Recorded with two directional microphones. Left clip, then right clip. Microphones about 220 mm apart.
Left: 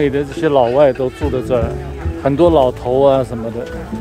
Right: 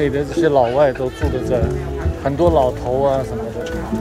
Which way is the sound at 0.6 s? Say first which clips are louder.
Left 5 dB; 40° left (ahead or behind).